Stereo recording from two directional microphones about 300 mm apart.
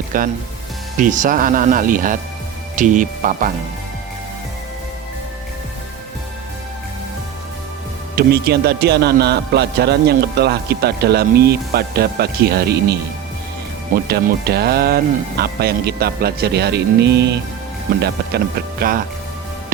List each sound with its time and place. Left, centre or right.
0.1 s speech: right
8.1 s a man's voice: right